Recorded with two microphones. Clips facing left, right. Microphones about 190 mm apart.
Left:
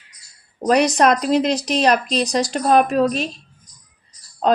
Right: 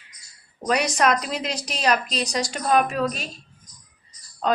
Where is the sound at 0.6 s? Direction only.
35° left (ahead or behind).